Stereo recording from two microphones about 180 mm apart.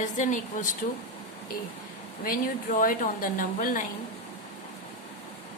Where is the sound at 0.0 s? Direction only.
45° left (ahead or behind).